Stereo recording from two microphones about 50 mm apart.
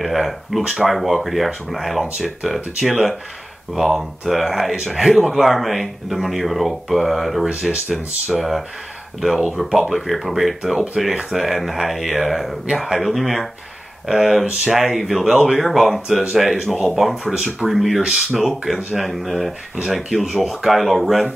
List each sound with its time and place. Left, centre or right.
0.0 s speech: centre